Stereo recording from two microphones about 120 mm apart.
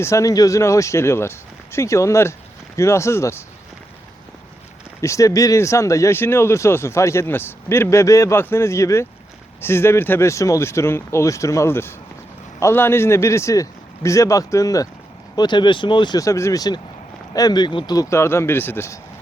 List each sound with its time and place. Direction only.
0.0 s speech: 25° left (ahead or behind)
4.9 s speech: 25° left (ahead or behind)
16.2 s speech: 25° left (ahead or behind)